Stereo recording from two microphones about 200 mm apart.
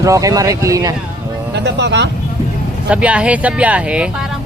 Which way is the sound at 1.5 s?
60° right (ahead or behind).